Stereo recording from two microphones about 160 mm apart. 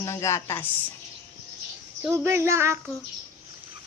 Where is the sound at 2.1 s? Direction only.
15° right (ahead or behind).